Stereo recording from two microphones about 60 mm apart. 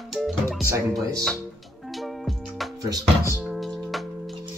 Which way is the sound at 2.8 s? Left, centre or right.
Right.